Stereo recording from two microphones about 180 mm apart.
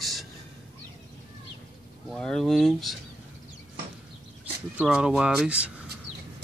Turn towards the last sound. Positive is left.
turn(degrees=-5)  # may be behind; listen again after turning